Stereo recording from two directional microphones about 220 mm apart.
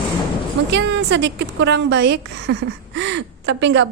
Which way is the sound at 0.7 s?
55° right (ahead or behind).